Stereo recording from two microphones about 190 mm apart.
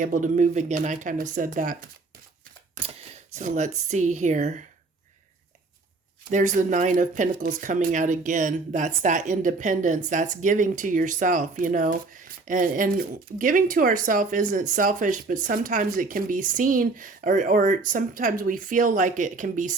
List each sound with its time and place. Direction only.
0.0 s speech: 45° right (ahead or behind)
3.3 s speech: 40° right (ahead or behind)
6.3 s speech: 40° right (ahead or behind)